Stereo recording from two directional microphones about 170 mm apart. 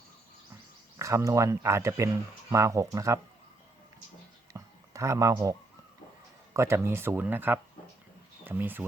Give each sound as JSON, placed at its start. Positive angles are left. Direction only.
{"t": 0.9, "sound": "speech", "side_deg": -20}
{"t": 4.5, "sound": "a sound", "side_deg": -20}
{"t": 6.5, "sound": "speech", "side_deg": -15}